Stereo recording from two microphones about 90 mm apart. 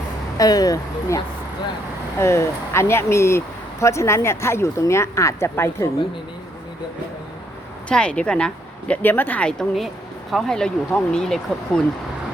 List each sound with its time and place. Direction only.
0.3 s speech: 45° left (ahead or behind)
7.9 s speech: 10° left (ahead or behind)